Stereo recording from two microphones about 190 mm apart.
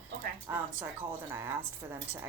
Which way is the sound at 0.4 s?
10° right (ahead or behind).